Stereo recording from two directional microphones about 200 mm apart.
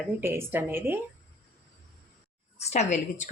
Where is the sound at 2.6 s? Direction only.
35° left (ahead or behind).